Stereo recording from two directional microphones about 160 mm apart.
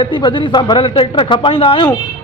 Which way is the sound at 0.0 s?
30° left (ahead or behind).